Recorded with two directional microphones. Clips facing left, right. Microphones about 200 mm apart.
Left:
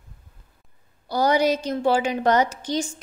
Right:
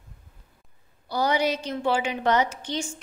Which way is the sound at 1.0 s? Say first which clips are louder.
Left 4 dB; 40° left (ahead or behind).